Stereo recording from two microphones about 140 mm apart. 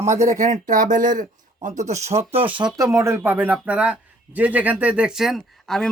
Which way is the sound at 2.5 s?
30° right (ahead or behind).